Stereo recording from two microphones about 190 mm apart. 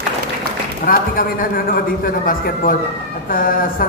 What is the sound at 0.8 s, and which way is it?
A man's voice, 50° left (ahead or behind).